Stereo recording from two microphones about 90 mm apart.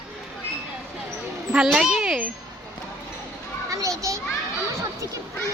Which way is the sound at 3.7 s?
40° right (ahead or behind).